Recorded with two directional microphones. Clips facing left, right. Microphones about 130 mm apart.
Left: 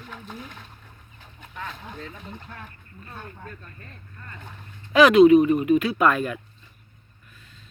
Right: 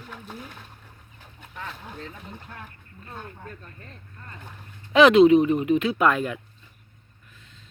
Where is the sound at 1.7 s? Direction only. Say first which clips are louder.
Left 1 dB; 5° right (ahead or behind).